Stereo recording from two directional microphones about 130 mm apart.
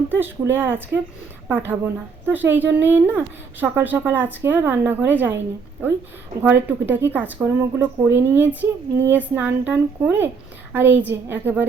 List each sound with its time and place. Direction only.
0.1 s a woman's voice: 15° right (ahead or behind)
6.4 s a woman's voice: 15° right (ahead or behind)